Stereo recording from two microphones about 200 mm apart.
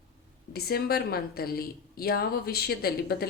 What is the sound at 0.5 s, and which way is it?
A woman's voice, 50° left (ahead or behind).